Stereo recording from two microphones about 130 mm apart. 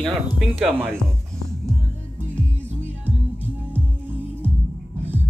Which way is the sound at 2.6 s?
15° right (ahead or behind).